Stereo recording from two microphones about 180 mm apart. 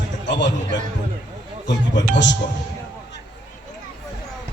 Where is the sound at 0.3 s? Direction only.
80° left.